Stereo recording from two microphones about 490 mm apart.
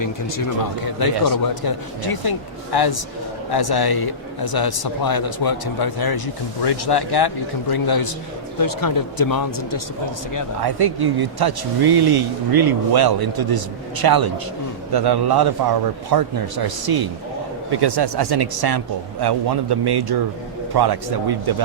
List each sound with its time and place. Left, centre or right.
0.0 s a man's voice: left
10.6 s speech: right